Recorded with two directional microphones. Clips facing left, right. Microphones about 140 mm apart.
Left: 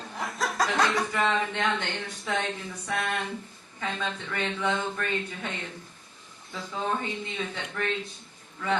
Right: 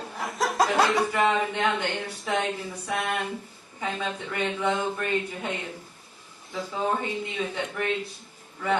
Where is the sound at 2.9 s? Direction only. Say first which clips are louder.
Right 2 dB; centre (ahead or behind).